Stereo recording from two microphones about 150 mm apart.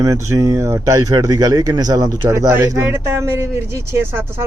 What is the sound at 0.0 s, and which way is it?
Speech, 20° right (ahead or behind).